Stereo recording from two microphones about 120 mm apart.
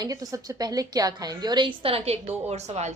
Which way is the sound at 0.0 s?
30° right (ahead or behind).